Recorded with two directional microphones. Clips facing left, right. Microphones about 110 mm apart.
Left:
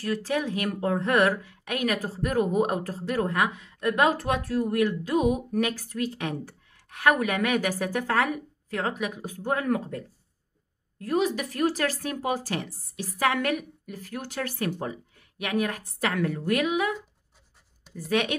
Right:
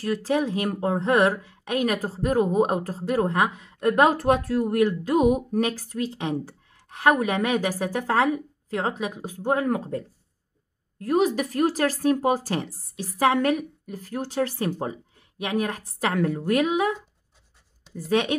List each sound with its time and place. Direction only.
0.0 s a woman's voice: 30° right (ahead or behind)
11.0 s speech: 40° right (ahead or behind)